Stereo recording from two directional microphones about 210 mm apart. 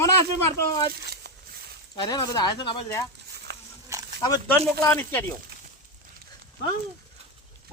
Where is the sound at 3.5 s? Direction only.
50° right (ahead or behind).